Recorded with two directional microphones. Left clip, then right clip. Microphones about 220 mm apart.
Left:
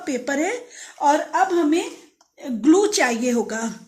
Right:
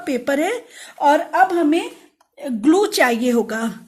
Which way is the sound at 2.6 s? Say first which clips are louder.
Right 2 dB; 45° right (ahead or behind).